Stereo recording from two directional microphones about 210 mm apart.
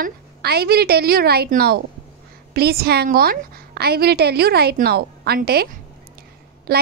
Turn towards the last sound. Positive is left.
turn(degrees=-45)  # may be behind; listen again after turning